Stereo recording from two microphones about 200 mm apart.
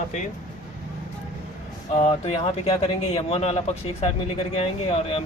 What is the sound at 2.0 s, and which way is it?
Speech, 30° left (ahead or behind).